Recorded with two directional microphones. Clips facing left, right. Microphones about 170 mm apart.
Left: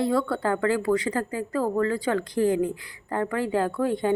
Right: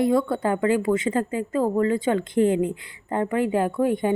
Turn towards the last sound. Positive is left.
turn(degrees=-15)  # may be behind; listen again after turning